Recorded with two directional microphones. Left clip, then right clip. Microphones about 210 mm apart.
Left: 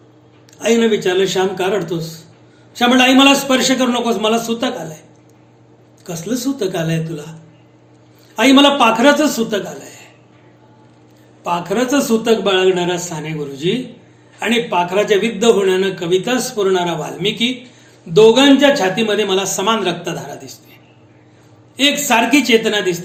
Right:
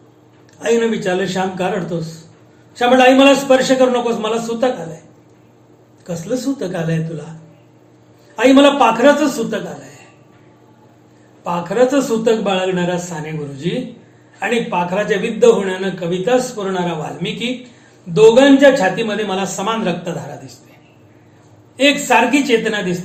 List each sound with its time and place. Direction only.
0.6 s a man's voice: 45° left (ahead or behind)
2.7 s a man's voice: 45° left (ahead or behind)
6.1 s a man's voice: 45° left (ahead or behind)
8.4 s a man's voice: 50° left (ahead or behind)
11.4 s a man's voice: 45° left (ahead or behind)
21.8 s a man's voice: 50° left (ahead or behind)